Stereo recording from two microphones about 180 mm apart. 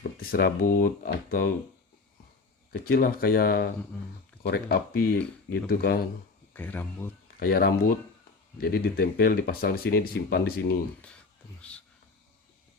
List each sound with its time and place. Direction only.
0.2 s speech: 55° left (ahead or behind)
2.7 s speech: 55° left (ahead or behind)
6.5 s speech: 10° left (ahead or behind)
7.3 s speech: 60° left (ahead or behind)